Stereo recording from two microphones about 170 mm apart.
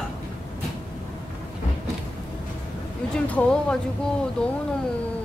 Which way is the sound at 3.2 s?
10° left (ahead or behind).